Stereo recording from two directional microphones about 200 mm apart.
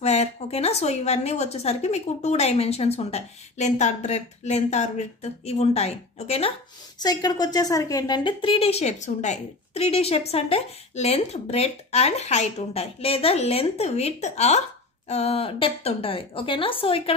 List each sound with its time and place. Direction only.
0.0 s a woman's voice: 35° left (ahead or behind)
7.0 s a woman's voice: 20° left (ahead or behind)